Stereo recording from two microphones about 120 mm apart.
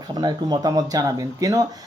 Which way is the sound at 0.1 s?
35° right (ahead or behind).